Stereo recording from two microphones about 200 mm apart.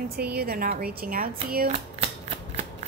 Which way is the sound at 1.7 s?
30° right (ahead or behind).